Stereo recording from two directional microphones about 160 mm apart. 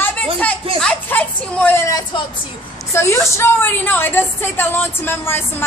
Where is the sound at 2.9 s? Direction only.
15° left (ahead or behind).